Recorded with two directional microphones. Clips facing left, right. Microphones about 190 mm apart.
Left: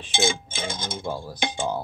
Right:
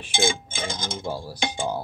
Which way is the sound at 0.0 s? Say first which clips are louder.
Even; 10° right (ahead or behind).